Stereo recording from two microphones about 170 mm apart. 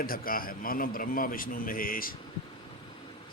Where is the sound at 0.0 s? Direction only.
55° left (ahead or behind).